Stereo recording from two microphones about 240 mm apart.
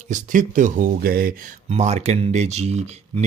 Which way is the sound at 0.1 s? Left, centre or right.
Right.